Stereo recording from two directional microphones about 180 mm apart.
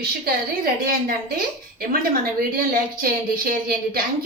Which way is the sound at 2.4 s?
50° right (ahead or behind).